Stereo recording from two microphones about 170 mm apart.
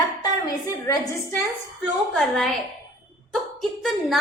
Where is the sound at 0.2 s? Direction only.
20° left (ahead or behind).